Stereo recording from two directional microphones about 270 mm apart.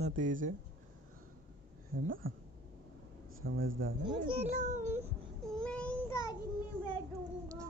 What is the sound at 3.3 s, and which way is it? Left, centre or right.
Speech, right.